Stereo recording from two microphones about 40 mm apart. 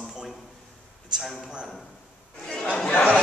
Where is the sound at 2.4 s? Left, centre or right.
Centre.